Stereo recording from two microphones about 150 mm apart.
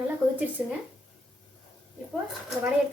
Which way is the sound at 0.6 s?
10° right (ahead or behind).